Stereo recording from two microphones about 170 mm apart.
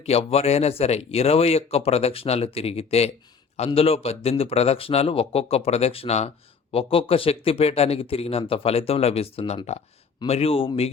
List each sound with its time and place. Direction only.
0.0 s a man's voice: 35° left (ahead or behind)